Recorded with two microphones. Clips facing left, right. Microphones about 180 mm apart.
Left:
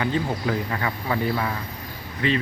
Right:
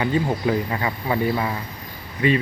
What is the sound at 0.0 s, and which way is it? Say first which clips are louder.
Speech: right 3 dB; 15° right (ahead or behind).